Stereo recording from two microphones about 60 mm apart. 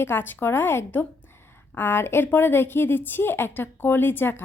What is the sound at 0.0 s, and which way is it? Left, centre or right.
A woman's voice, left.